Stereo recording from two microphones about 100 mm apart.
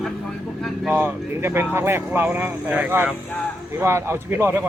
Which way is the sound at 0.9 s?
25° right (ahead or behind).